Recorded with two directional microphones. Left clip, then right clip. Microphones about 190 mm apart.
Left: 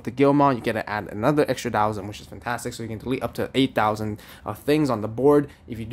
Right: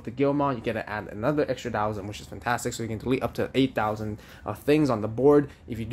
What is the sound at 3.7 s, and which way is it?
Speech, 25° left (ahead or behind).